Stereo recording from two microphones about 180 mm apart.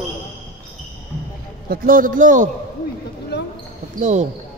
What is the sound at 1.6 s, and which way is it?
Speech, 50° right (ahead or behind).